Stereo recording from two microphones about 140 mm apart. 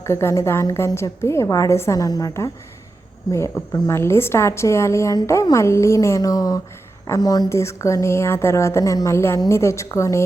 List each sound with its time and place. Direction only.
0.0 s a woman's voice: 20° left (ahead or behind)